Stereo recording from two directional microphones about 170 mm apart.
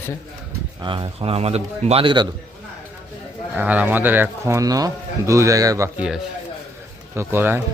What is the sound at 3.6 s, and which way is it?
A man's voice, 10° right (ahead or behind).